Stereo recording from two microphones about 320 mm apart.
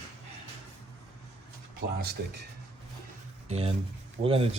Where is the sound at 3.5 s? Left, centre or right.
Centre.